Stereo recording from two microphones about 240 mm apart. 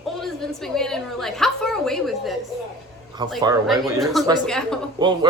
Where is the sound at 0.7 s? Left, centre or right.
Centre.